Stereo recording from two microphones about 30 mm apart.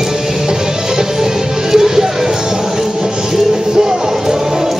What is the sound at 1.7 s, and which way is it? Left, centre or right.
Music, centre.